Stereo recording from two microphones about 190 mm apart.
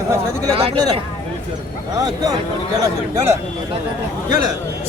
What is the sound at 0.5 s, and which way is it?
Speech, 30° right (ahead or behind).